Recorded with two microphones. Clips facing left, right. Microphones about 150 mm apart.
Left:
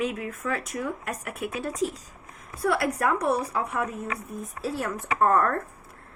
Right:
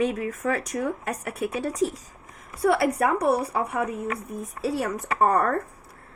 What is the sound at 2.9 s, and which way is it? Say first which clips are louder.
Speech: right 2 dB; 30° right (ahead or behind).